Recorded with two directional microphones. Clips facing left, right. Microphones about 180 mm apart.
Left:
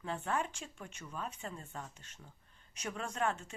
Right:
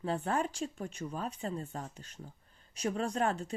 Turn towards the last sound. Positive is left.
turn(degrees=-35)  # may be behind; listen again after turning